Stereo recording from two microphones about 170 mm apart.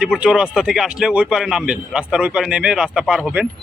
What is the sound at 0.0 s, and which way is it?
A man's voice, 5° right (ahead or behind).